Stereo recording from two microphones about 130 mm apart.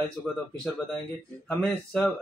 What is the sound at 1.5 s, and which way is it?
Speech, 10° left (ahead or behind).